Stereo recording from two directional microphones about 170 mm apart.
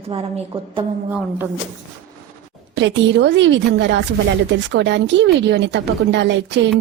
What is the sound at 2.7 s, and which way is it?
A woman's voice, 90° right.